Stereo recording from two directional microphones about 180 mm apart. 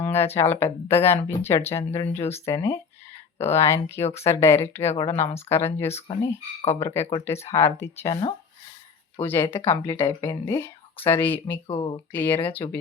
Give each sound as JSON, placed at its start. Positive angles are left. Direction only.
{"t": 0.0, "sound": "speech", "side_deg": 10}
{"t": 2.0, "sound": "speech", "side_deg": 35}
{"t": 2.3, "sound": "speech", "side_deg": 15}
{"t": 6.1, "sound": "speech", "side_deg": 30}
{"t": 6.7, "sound": "speech", "side_deg": 15}
{"t": 9.2, "sound": "speech", "side_deg": 10}
{"t": 11.7, "sound": "speech", "side_deg": 25}
{"t": 12.1, "sound": "speech", "side_deg": 10}
{"t": 12.4, "sound": "speech", "side_deg": 30}